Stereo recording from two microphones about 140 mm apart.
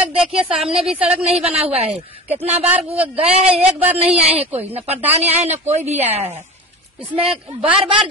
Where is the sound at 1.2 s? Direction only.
50° right (ahead or behind).